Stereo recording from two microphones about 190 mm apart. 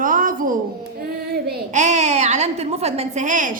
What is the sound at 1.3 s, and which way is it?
Child singing, 55° right (ahead or behind).